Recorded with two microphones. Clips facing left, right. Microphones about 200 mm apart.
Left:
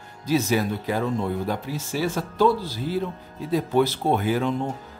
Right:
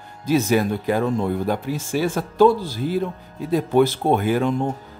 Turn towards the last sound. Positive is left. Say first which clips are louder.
# right 3 dB
turn(degrees=-50)  # may be behind; listen again after turning